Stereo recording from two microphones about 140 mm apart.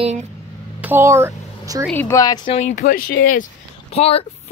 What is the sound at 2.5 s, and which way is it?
Speech, 60° left (ahead or behind).